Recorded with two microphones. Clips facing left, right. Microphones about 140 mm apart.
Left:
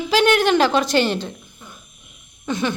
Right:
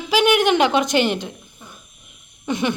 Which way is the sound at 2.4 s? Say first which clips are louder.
Right 1 dB; 20° right (ahead or behind).